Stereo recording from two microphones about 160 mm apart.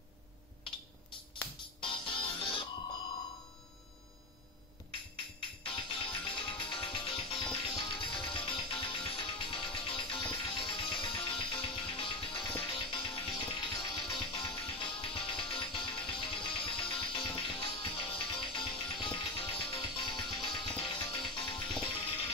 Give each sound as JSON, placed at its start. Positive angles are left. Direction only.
{"t": 1.8, "sound": "music", "side_deg": 30}
{"t": 5.1, "sound": "music", "side_deg": 35}